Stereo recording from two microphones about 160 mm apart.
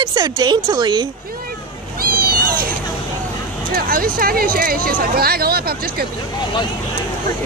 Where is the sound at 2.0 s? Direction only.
65° right (ahead or behind).